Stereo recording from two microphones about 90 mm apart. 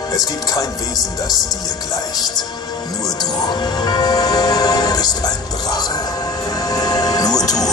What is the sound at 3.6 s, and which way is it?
Music, 50° left (ahead or behind).